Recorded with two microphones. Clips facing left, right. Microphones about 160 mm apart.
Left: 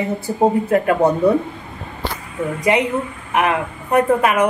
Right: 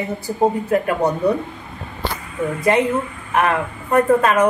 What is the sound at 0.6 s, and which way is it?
Speech, 25° left (ahead or behind).